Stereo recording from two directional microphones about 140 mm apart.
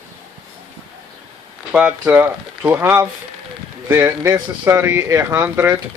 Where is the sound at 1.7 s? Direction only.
10° right (ahead or behind).